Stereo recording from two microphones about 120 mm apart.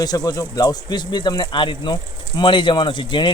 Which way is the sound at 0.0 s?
30° left (ahead or behind).